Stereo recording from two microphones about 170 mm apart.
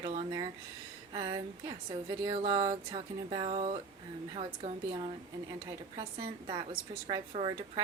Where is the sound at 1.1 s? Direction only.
30° right (ahead or behind).